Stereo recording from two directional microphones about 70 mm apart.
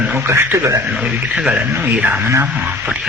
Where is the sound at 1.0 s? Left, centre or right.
Centre.